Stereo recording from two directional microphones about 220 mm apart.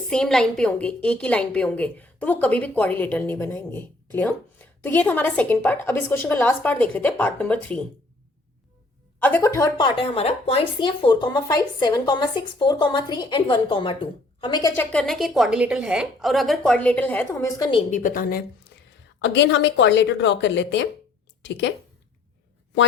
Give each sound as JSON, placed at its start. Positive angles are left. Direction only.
{"t": 0.1, "sound": "a woman's voice", "side_deg": 5}
{"t": 9.2, "sound": "a woman's voice", "side_deg": 10}
{"t": 14.9, "sound": "a woman's voice", "side_deg": 0}
{"t": 17.7, "sound": "a woman's voice", "side_deg": 25}
{"t": 18.0, "sound": "a woman's voice", "side_deg": 40}
{"t": 18.7, "sound": "a sound", "side_deg": 50}
{"t": 19.2, "sound": "a woman's voice", "side_deg": 50}